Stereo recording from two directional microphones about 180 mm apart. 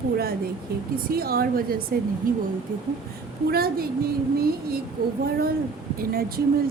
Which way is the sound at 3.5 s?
55° right (ahead or behind).